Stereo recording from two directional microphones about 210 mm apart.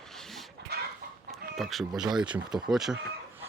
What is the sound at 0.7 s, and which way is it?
Chicken, 50° right (ahead or behind).